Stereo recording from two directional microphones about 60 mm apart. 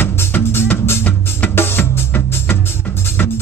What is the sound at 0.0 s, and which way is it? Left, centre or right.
Music, left.